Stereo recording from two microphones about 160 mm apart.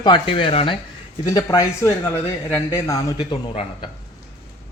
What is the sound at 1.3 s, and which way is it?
A man's voice, 20° left (ahead or behind).